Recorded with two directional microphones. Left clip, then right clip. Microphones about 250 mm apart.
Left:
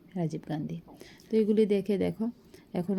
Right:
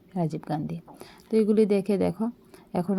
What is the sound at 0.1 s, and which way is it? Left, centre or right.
A woman's voice, centre.